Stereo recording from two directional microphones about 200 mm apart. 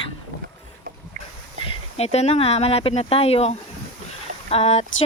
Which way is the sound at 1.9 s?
30° left (ahead or behind).